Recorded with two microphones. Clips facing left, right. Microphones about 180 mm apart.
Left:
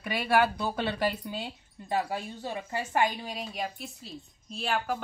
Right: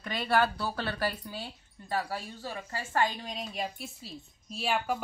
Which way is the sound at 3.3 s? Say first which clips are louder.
Left 1 dB; centre (ahead or behind).